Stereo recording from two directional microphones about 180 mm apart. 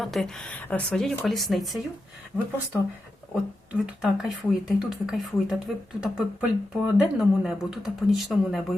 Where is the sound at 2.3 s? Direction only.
15° left (ahead or behind).